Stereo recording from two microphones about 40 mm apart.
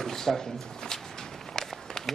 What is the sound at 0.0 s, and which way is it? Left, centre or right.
Speech, centre.